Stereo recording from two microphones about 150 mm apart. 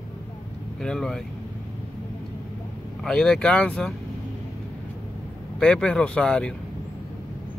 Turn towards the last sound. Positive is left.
turn(degrees=5)  # may be behind; listen again after turning